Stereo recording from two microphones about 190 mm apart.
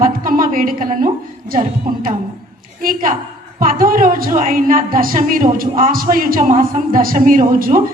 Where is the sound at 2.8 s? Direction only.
45° right (ahead or behind).